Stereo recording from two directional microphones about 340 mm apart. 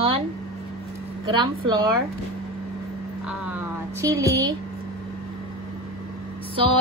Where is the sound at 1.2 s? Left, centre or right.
Centre.